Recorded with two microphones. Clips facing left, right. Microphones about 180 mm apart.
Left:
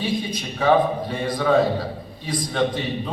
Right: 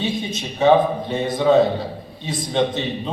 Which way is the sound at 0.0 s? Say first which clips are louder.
Right 1 dB; 25° right (ahead or behind).